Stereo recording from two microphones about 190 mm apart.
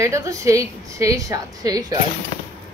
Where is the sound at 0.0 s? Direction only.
15° right (ahead or behind).